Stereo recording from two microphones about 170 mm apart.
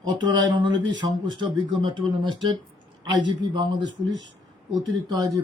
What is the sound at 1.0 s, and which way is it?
Speech, 25° right (ahead or behind).